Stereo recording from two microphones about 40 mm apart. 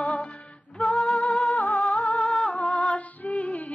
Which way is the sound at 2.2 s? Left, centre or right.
Centre.